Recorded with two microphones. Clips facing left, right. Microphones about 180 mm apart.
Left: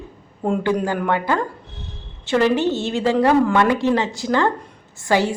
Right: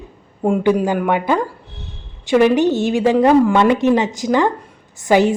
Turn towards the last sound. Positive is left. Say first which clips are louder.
# right 5 dB
turn(degrees=-20)  # may be behind; listen again after turning